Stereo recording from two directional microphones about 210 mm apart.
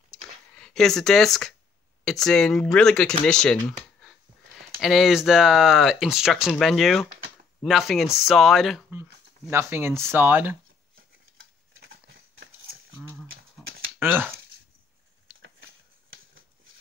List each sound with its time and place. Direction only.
0.1 s a sound: 5° left (ahead or behind)
2.0 s speech: centre (ahead or behind)
4.7 s speech: centre (ahead or behind)
9.5 s speech: 10° right (ahead or behind)
11.8 s a sound: 55° right (ahead or behind)
13.9 s speech: 10° right (ahead or behind)